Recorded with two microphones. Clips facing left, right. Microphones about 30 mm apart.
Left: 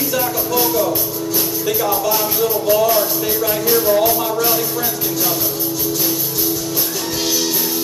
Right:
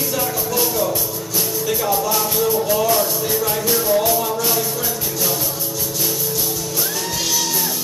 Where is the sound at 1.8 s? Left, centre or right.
Centre.